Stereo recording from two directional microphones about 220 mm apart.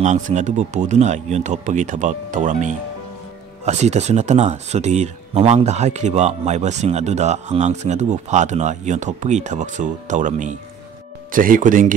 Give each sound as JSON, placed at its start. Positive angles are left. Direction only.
{"t": 0.0, "sound": "speech", "side_deg": -30}